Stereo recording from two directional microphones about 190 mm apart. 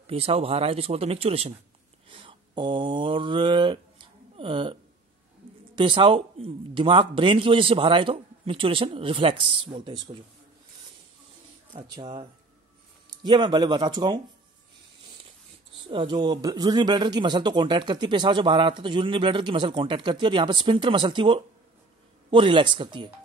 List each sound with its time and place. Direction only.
0.0 s speech: 30° right (ahead or behind)
2.0 s mantra: 25° right (ahead or behind)
5.8 s speech: 25° right (ahead or behind)
11.7 s speech: 25° right (ahead or behind)
15.9 s speech: 25° right (ahead or behind)